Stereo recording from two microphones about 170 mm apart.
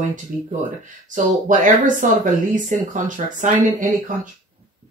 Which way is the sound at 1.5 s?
50° right (ahead or behind).